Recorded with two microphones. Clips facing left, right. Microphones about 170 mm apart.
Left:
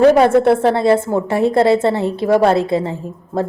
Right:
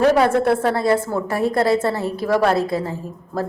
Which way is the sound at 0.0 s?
25° left (ahead or behind).